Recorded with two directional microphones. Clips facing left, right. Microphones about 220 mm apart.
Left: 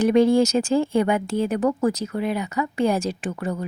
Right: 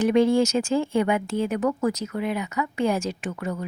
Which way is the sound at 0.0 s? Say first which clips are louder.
Left 2 dB; 35° left (ahead or behind).